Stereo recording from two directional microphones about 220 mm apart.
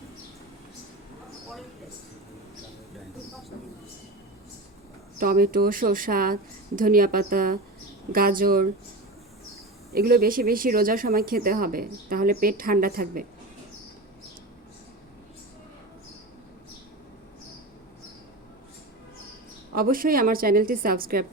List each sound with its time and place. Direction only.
5.2 s speech: 40° right (ahead or behind)
9.9 s speech: 45° right (ahead or behind)
19.7 s speech: 40° right (ahead or behind)